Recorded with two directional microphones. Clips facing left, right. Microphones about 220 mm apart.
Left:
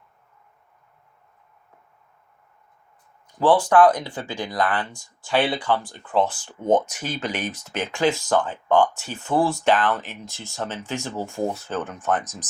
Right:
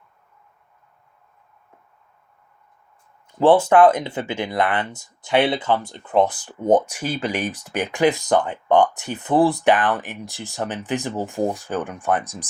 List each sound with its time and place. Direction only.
3.3 s speech: 25° right (ahead or behind)
6.9 s speech: 10° right (ahead or behind)